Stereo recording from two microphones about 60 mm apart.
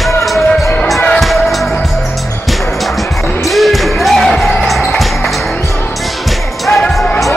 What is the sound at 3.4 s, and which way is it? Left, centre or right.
Music, centre.